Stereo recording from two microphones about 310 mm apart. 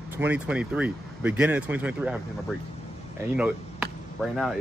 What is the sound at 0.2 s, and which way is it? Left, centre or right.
Speech, centre.